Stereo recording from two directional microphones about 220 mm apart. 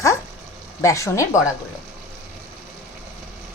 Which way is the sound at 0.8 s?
15° left (ahead or behind).